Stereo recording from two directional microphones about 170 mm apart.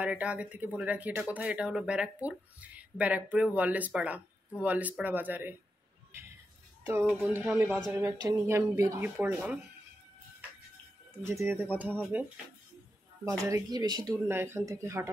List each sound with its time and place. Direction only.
0.0 s speech: 5° right (ahead or behind)
6.9 s speech: 15° right (ahead or behind)
11.2 s speech: 15° right (ahead or behind)
13.5 s speech: 20° right (ahead or behind)